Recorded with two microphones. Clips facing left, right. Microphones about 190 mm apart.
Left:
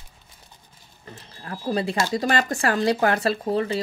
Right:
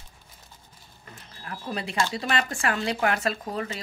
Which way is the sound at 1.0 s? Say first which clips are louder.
Left 4 dB; 30° left (ahead or behind).